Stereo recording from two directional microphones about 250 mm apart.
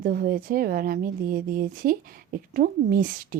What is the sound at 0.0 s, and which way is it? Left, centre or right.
A woman's voice, right.